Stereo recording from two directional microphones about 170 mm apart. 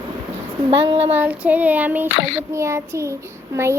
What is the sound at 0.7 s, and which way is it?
Speech, 35° right (ahead or behind).